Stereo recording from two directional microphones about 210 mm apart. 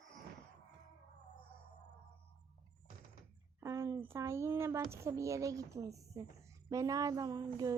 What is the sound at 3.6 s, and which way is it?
Speech, 15° right (ahead or behind).